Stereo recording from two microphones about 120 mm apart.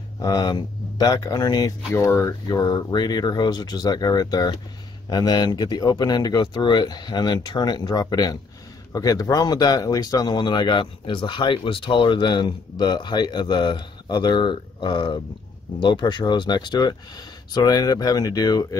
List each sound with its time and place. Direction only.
0.2 s speech: 30° left (ahead or behind)
1.9 s speech: 20° left (ahead or behind)
2.4 s speech: 35° left (ahead or behind)